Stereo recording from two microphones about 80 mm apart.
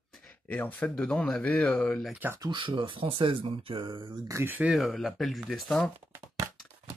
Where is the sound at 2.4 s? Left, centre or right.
Right.